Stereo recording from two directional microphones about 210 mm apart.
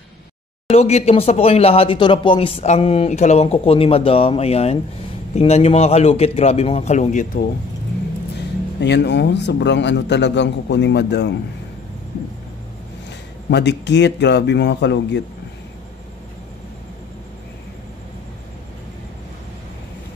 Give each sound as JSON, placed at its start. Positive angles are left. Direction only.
{"t": 0.7, "sound": "a man's voice", "side_deg": 30}
{"t": 8.8, "sound": "a man's voice", "side_deg": 55}
{"t": 13.5, "sound": "a man's voice", "side_deg": 55}